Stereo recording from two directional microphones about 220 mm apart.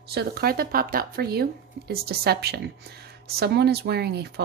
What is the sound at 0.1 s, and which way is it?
Speech, 45° right (ahead or behind).